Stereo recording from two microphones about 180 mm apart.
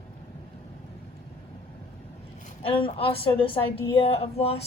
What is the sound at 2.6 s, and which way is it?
A woman's voice, 30° left (ahead or behind).